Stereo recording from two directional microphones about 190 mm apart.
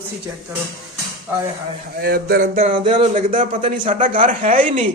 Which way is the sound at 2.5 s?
30° right (ahead or behind).